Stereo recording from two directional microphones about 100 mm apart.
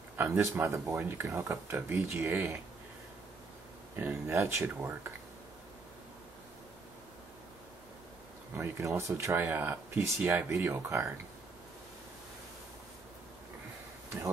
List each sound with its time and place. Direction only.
0.2 s speech: 25° right (ahead or behind)
4.0 s speech: 25° right (ahead or behind)
8.5 s speech: 25° right (ahead or behind)